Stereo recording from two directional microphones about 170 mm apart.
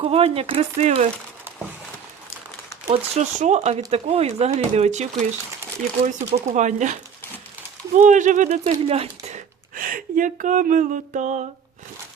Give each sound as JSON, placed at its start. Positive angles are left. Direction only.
{"t": 0.0, "sound": "speech", "side_deg": -35}
{"t": 2.9, "sound": "speech", "side_deg": -45}